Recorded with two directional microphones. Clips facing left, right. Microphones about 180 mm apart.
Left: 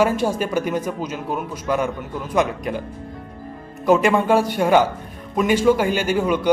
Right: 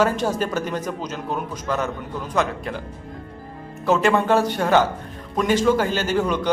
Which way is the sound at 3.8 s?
15° left (ahead or behind).